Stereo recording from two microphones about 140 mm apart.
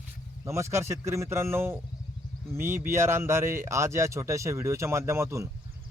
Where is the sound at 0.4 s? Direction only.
20° right (ahead or behind).